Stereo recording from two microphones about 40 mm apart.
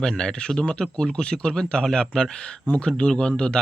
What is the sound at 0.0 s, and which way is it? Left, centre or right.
A man's voice, centre.